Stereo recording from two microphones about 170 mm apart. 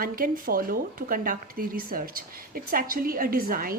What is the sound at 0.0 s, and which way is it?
A woman's voice, 55° right (ahead or behind).